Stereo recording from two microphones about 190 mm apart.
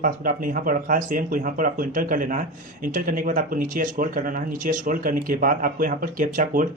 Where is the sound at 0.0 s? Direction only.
45° right (ahead or behind).